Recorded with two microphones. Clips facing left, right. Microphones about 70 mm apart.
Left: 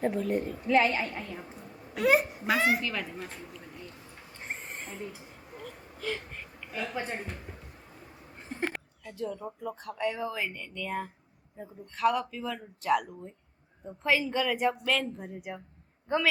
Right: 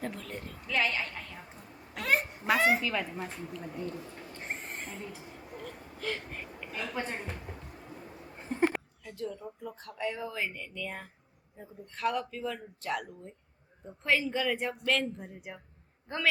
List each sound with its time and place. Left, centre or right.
0.0 s a woman's voice: centre
0.7 s a woman's voice: left
1.1 s speech: centre
4.4 s owl: centre
5.5 s a sound: centre
6.7 s a woman's voice: centre
8.7 s speech: centre